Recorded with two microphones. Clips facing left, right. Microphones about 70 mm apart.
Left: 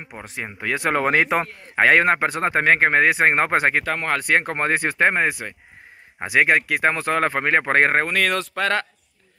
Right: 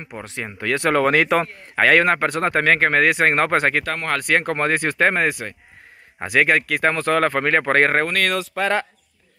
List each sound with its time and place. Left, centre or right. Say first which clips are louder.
0.4 s speech: right 2 dB; centre
1.9 s speech: right 1 dB; left
8.1 s speech: even; centre